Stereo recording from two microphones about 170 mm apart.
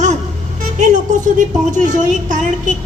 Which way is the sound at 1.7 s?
45° right (ahead or behind).